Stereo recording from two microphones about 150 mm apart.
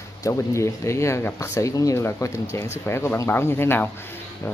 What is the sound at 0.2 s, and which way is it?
Speech, 20° left (ahead or behind).